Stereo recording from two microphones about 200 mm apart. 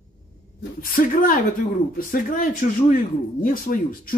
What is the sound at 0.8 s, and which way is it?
Speech, 45° left (ahead or behind).